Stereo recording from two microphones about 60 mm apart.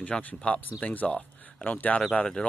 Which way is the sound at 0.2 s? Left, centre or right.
Left.